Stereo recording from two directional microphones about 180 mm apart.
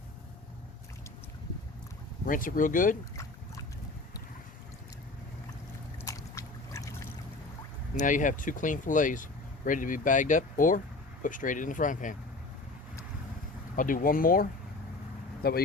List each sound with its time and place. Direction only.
2.2 s speech: 50° left (ahead or behind)
3.2 s boat: 15° left (ahead or behind)
6.0 s boat: 15° left (ahead or behind)
7.9 s speech: 45° left (ahead or behind)
13.7 s speech: 50° left (ahead or behind)
15.4 s speech: 55° left (ahead or behind)